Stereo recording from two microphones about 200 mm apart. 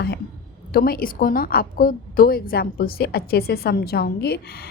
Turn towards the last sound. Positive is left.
turn(degrees=50)  # may be behind; listen again after turning